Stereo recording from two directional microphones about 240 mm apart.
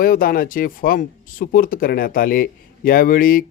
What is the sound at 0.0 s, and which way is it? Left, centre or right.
Speech, left.